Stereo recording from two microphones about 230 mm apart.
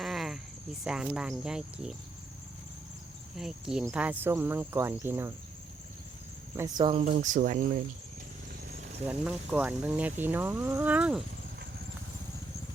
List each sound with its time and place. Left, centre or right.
0.0 s cricket: centre
0.9 s speech: centre
3.3 s speech: centre
6.6 s speech: centre; by 7.6 s right
9.0 s speech: centre